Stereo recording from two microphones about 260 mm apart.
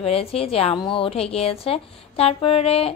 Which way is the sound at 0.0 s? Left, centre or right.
Left.